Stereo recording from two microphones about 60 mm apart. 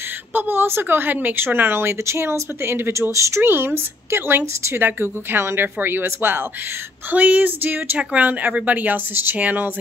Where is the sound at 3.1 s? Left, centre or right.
Right.